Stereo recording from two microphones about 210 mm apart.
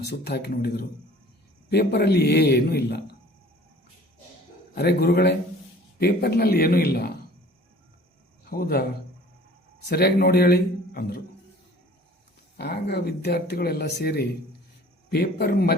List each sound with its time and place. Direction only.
0.0 s speech: 50° left (ahead or behind)
4.7 s speech: 50° left (ahead or behind)
8.4 s speech: 45° left (ahead or behind)
9.9 s a man's voice: 50° left (ahead or behind)
12.5 s speech: 50° left (ahead or behind)